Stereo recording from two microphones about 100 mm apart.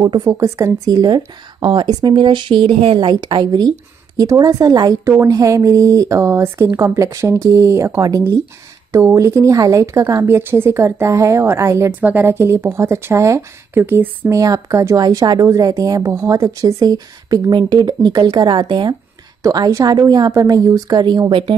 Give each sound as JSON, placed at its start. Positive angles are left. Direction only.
{"t": 0.1, "sound": "speech", "side_deg": -45}
{"t": 0.4, "sound": "a woman's voice", "side_deg": -30}
{"t": 14.3, "sound": "a woman's voice", "side_deg": -35}
{"t": 19.4, "sound": "a woman's voice", "side_deg": -35}